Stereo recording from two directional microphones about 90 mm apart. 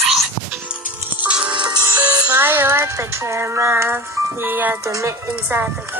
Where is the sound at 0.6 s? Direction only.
15° right (ahead or behind).